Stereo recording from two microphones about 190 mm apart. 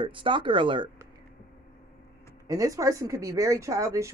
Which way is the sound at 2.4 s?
20° right (ahead or behind).